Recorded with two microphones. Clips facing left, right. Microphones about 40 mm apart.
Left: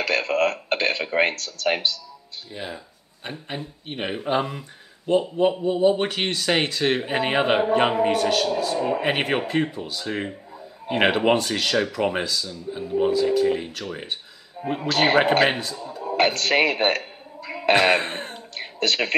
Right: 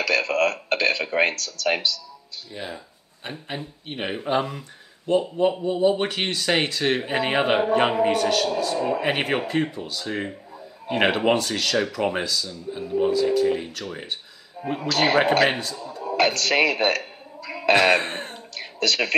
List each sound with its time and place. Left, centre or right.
0.0 s a man's voice: left
2.5 s speech: centre
14.8 s speech: left
16.0 s a sound: left
18.0 s speech: centre
18.6 s speech: left